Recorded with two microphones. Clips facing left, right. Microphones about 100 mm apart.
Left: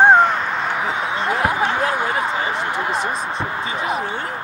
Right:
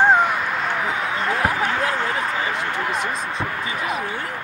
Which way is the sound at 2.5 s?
20° left (ahead or behind).